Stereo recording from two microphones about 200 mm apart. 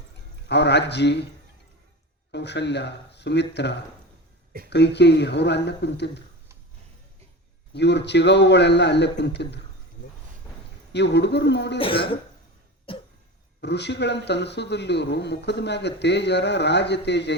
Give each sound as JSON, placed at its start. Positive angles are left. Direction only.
{"t": 0.4, "sound": "speech", "side_deg": 60}
{"t": 2.3, "sound": "speech", "side_deg": 60}
{"t": 7.7, "sound": "speech", "side_deg": 60}
{"t": 10.9, "sound": "speech", "side_deg": 60}
{"t": 11.8, "sound": "cough", "side_deg": 25}
{"t": 13.6, "sound": "speech", "side_deg": 60}